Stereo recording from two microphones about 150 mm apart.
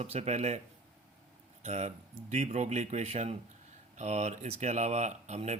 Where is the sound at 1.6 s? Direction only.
50° right (ahead or behind).